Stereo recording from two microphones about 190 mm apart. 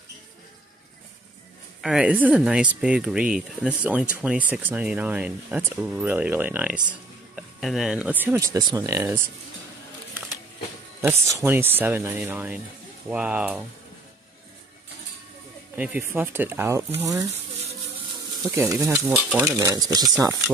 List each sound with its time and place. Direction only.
1.8 s speech: 5° right (ahead or behind)
11.0 s speech: 15° right (ahead or behind)
15.7 s speech: 10° right (ahead or behind)
18.5 s speech: 15° right (ahead or behind)